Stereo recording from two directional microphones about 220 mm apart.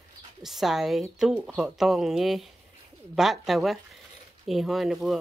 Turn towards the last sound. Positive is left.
turn(degrees=0)  # may be behind; listen again after turning